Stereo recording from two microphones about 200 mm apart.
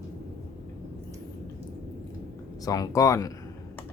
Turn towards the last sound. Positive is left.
turn(degrees=15)  # may be behind; listen again after turning